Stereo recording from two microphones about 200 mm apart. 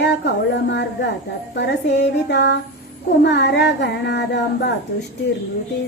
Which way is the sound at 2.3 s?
60° left (ahead or behind).